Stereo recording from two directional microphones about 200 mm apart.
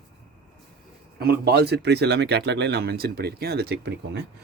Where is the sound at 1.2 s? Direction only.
50° right (ahead or behind).